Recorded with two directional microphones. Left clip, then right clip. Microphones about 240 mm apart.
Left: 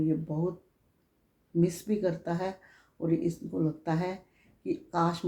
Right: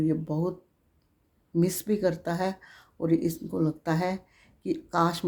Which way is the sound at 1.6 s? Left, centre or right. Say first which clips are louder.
Right 2 dB; right.